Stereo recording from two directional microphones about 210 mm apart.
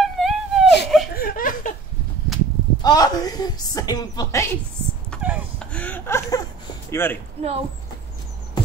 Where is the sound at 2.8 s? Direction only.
20° left (ahead or behind).